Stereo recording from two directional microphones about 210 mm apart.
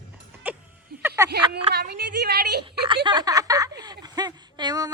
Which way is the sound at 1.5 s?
50° right (ahead or behind).